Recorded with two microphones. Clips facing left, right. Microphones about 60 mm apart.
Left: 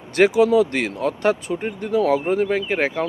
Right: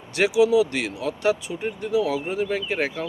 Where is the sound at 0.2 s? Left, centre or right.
Left.